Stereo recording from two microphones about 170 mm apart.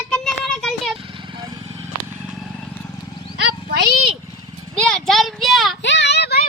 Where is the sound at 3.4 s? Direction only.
75° right (ahead or behind).